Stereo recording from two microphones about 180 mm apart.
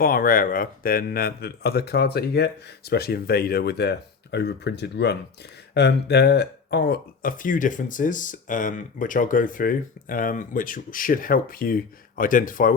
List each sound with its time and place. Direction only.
0.0 s speech: 50° left (ahead or behind)